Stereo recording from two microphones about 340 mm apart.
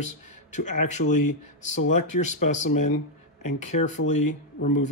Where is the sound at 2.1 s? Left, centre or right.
Left.